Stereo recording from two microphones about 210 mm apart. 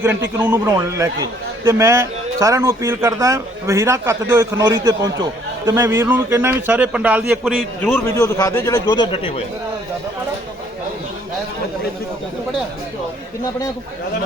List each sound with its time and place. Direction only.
0.0 s a man's voice: 10° right (ahead or behind)
7.9 s a man's voice: 10° left (ahead or behind)